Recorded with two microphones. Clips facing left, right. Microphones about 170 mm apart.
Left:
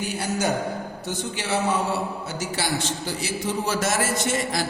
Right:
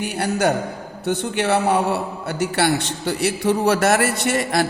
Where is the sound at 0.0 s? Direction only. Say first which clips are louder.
Right 5 dB; 60° right (ahead or behind).